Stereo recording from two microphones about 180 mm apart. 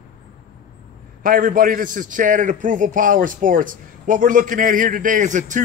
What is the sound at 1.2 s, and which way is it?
A man's voice, 50° right (ahead or behind).